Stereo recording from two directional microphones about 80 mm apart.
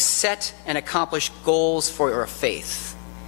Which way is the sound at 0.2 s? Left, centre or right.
Centre.